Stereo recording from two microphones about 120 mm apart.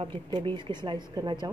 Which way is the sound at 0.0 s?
45° right (ahead or behind).